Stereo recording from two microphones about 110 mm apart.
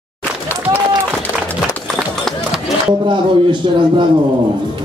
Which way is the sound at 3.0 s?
45° right (ahead or behind).